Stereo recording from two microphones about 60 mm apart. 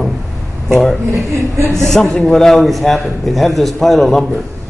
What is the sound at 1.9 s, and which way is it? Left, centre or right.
A man's voice, centre.